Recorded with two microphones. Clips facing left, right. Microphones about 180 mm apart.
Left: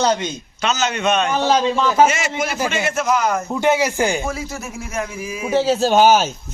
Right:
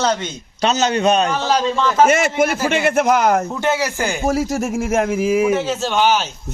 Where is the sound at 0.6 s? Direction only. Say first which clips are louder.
Right 4 dB; 35° right (ahead or behind).